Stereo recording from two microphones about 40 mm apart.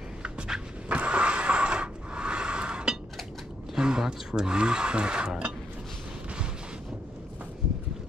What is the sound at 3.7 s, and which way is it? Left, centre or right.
Speech, centre.